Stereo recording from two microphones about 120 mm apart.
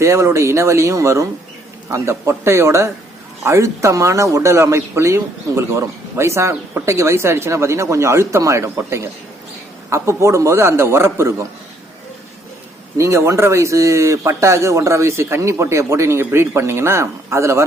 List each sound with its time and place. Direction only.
0.0 s speech: 25° right (ahead or behind)
13.0 s speech: 25° right (ahead or behind)